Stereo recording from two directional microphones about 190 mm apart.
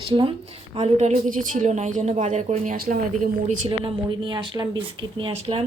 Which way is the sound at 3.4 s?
30° right (ahead or behind).